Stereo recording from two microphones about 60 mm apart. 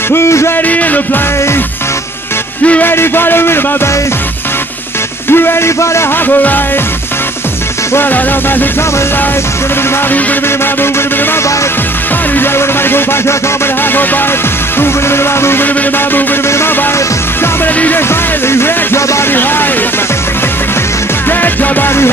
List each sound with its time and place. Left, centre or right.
0.1 s speech: left
0.7 s music: left
2.8 s a man's voice: left
5.3 s a man's voice: left
7.9 s a man's voice: left
12.4 s music: left
14.8 s speech: left
18.5 s speech: left
21.3 s music: left